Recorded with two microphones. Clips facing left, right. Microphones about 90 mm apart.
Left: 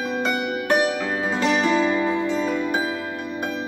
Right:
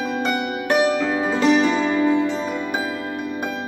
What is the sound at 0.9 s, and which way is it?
Music, 10° left (ahead or behind).